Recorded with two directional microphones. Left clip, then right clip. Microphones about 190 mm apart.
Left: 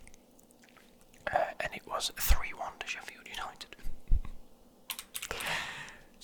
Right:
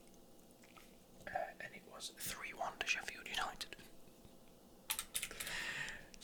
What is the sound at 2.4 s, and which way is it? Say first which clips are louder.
Whispering: left 4 dB; 10° left (ahead or behind).